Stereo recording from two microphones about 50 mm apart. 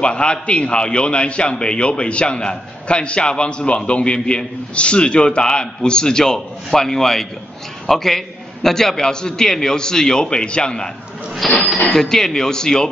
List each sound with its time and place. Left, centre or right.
0.0 s a man's voice: centre
11.4 s a man's voice: centre
11.9 s a man's voice: centre